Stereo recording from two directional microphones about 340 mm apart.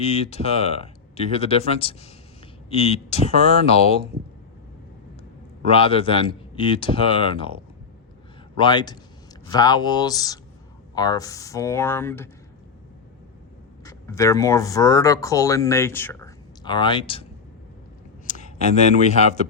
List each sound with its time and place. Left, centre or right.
0.0 s speech: centre
5.6 s speech: centre
8.5 s speech: centre
13.8 s speech: centre
18.3 s a sound: left
18.8 s a man's voice: centre